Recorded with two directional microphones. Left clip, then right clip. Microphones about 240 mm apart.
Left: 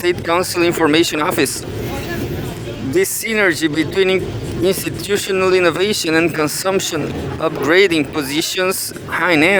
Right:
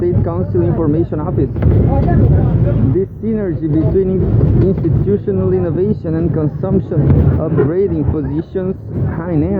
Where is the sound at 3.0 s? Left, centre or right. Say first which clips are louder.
Left 3 dB; left.